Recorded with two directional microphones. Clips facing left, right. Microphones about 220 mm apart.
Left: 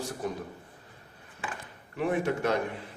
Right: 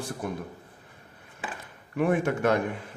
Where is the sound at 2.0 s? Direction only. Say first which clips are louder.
Right 3 dB; 50° right (ahead or behind).